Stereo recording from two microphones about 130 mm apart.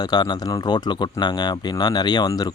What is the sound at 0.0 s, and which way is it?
Speech, 35° left (ahead or behind).